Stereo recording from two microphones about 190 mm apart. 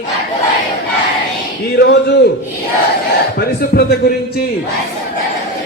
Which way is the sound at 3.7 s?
55° left (ahead or behind).